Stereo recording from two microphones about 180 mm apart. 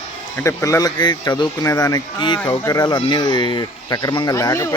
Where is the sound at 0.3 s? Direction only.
15° left (ahead or behind).